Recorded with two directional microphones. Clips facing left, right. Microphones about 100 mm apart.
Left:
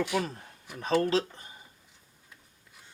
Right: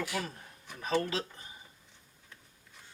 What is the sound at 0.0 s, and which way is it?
Speech, 25° left (ahead or behind).